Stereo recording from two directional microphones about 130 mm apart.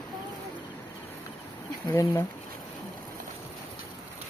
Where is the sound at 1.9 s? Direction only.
20° left (ahead or behind).